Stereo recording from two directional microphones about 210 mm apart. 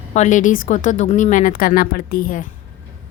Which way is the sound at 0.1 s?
35° left (ahead or behind).